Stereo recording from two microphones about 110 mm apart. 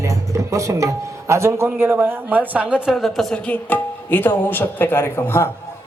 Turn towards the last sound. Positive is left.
turn(degrees=20)  # may be behind; listen again after turning